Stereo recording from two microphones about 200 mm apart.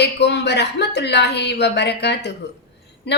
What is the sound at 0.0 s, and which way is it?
A woman's voice, 60° left (ahead or behind).